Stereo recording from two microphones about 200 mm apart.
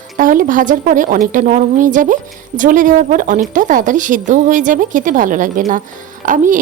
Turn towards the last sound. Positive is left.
turn(degrees=-40)  # may be behind; listen again after turning